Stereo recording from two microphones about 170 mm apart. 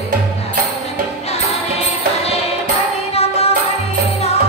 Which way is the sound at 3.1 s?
35° left (ahead or behind).